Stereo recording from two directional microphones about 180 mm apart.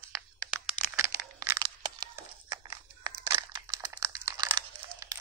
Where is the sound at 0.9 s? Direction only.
15° right (ahead or behind).